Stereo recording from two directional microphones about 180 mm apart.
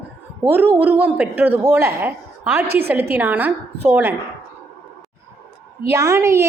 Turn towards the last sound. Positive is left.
turn(degrees=-15)  # may be behind; listen again after turning